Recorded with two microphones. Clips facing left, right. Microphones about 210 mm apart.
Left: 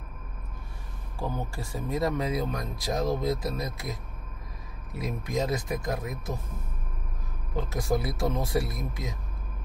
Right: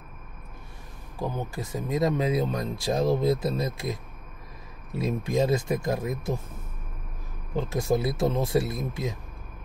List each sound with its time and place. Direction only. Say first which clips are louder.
1.2 s speech: right 2 dB; 20° right (ahead or behind)
4.9 s speech: right 5 dB; 25° right (ahead or behind)
7.7 s speech: right 3 dB; 25° right (ahead or behind)